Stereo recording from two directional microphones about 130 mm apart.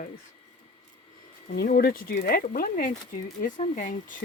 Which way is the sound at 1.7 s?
90° left.